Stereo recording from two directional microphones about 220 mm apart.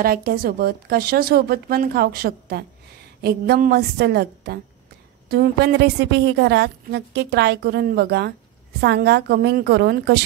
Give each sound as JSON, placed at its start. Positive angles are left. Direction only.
{"t": 0.0, "sound": "a woman's voice", "side_deg": -45}